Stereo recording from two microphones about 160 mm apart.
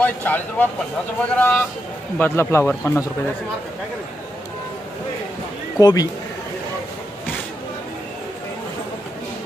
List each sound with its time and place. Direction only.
0.0 s speech: 10° left (ahead or behind)
5.8 s speech: 25° left (ahead or behind)